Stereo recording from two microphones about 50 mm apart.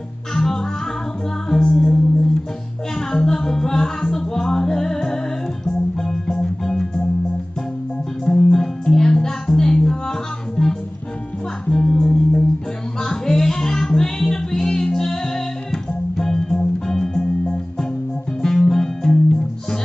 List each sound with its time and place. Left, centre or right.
0.3 s music: centre
3.1 s music: centre
8.3 s music: centre